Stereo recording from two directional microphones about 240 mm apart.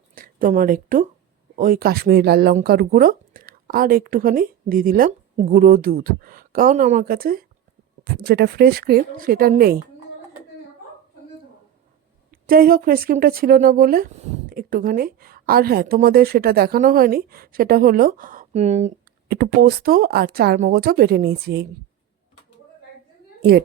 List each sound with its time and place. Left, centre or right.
0.1 s speech: right
12.3 s speech: right
19.3 s speech: right
23.4 s a woman's voice: right